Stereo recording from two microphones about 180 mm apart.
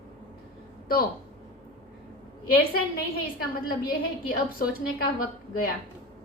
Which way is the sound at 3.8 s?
55° left (ahead or behind).